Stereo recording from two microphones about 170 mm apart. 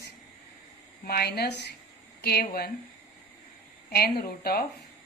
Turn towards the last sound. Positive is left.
turn(degrees=65)  # may be behind; listen again after turning